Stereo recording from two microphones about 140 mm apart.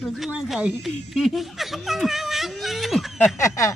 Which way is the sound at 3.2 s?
20° left (ahead or behind).